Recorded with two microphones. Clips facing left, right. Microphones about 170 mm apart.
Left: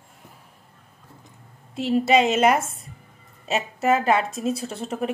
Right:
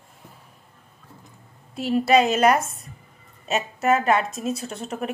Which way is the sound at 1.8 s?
25° left (ahead or behind).